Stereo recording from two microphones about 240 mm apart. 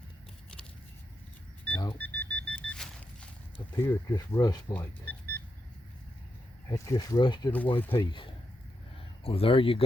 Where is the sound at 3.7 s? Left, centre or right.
Centre.